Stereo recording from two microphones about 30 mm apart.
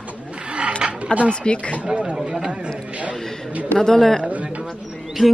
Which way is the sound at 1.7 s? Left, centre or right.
Right.